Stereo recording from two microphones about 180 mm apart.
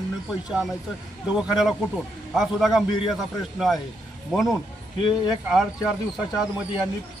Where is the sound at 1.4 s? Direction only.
Centre (ahead or behind).